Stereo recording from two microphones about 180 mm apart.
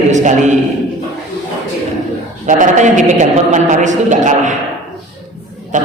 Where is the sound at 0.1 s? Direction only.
40° right (ahead or behind).